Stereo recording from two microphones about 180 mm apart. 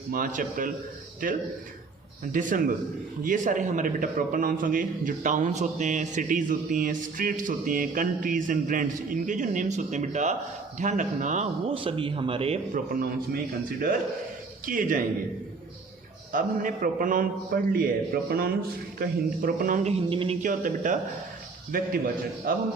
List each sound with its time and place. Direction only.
0.1 s a man's voice: 50° right (ahead or behind); by 12.5 s 30° right (ahead or behind)
12.7 s a man's voice: 55° right (ahead or behind)
14.7 s a man's voice: 50° right (ahead or behind)
16.3 s a man's voice: 50° right (ahead or behind); by 20.3 s 30° right (ahead or behind)
20.4 s a man's voice: 45° right (ahead or behind)